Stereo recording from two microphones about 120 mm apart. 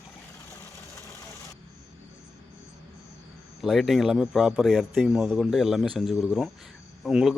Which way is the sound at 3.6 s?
Centre (ahead or behind).